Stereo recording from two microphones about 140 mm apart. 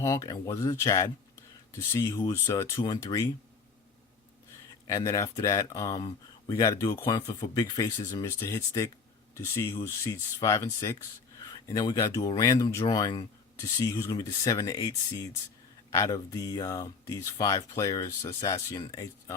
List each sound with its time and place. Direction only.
0.0 s speech: 25° left (ahead or behind)
4.9 s speech: 25° left (ahead or behind)